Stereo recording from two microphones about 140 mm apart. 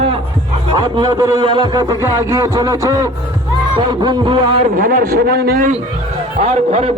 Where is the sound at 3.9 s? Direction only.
30° right (ahead or behind).